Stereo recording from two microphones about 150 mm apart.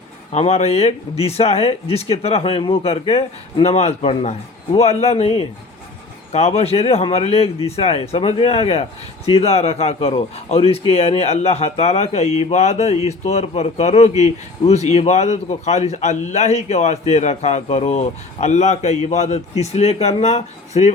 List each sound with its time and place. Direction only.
0.3 s a man's voice: 45° left (ahead or behind)
6.3 s a man's voice: 45° left (ahead or behind)